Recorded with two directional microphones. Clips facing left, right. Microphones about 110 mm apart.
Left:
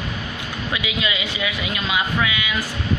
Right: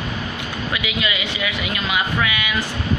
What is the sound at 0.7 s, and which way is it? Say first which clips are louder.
Speech: even; 20° left (ahead or behind).